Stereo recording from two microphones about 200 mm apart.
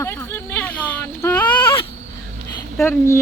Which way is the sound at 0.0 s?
15° left (ahead or behind).